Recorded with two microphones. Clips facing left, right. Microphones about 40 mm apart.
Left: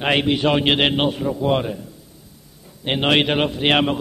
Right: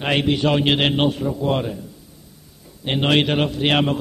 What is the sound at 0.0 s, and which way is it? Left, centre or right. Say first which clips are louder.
A man's voice: left 1 dB; centre.